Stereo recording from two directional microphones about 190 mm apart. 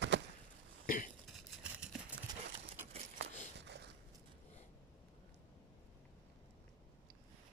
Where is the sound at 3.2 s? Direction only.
65° right (ahead or behind).